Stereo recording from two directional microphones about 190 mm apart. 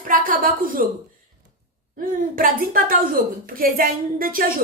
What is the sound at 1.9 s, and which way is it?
A woman's voice, 50° right (ahead or behind).